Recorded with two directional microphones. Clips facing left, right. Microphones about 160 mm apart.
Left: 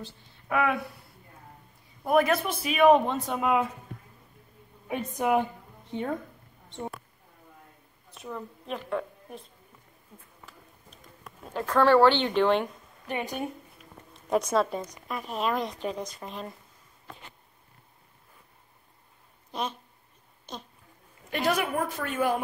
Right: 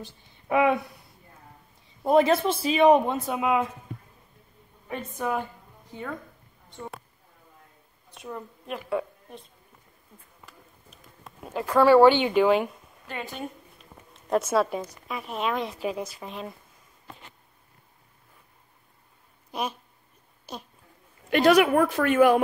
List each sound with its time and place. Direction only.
0.0 s speech: 20° right (ahead or behind)
2.0 s speech: 25° right (ahead or behind)
3.3 s speech: centre (ahead or behind)
4.8 s a woman's voice: 15° left (ahead or behind)
8.2 s speech: 5° right (ahead or behind)
10.1 s speech: 10° left (ahead or behind)
11.4 s speech: 10° right (ahead or behind)
13.0 s a woman's voice: 15° left (ahead or behind)
14.1 s speech: centre (ahead or behind)
19.5 s speech: 10° right (ahead or behind)
21.3 s a woman's voice: 80° right